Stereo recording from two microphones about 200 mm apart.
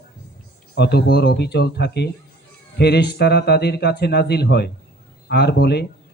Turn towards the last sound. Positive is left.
turn(degrees=55)  # may be behind; listen again after turning